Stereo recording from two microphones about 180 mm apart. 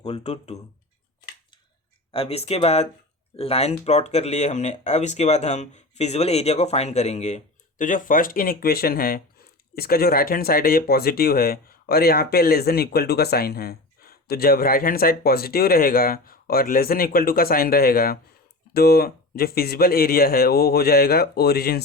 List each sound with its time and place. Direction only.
0.0 s speech: 35° left (ahead or behind)
2.1 s speech: 35° left (ahead or behind); by 21.8 s 60° left (ahead or behind)